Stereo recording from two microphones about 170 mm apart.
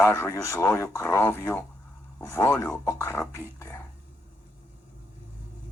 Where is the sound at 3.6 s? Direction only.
15° left (ahead or behind).